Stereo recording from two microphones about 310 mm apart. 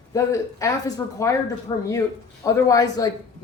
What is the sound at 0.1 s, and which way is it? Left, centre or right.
Speech, centre.